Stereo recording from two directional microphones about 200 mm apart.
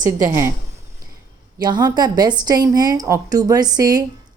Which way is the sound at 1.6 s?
20° right (ahead or behind).